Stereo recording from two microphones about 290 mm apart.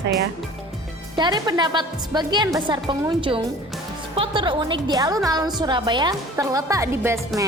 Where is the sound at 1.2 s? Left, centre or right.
Centre.